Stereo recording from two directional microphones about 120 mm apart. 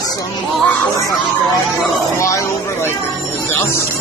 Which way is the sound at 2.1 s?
25° left (ahead or behind).